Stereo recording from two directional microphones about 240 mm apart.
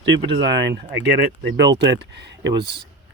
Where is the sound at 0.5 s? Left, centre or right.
Right.